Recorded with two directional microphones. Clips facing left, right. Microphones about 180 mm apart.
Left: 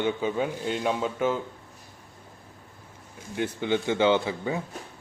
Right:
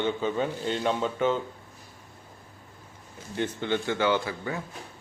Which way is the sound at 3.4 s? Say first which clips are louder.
Left 2 dB; 15° left (ahead or behind).